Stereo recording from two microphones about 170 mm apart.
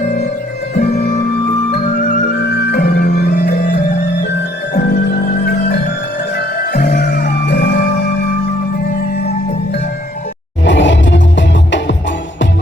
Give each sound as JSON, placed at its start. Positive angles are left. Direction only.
{"t": 0.7, "sound": "music", "side_deg": 50}
{"t": 2.4, "sound": "music", "side_deg": 85}
{"t": 2.7, "sound": "music", "side_deg": 60}
{"t": 4.7, "sound": "music", "side_deg": 65}
{"t": 10.6, "sound": "music", "side_deg": 90}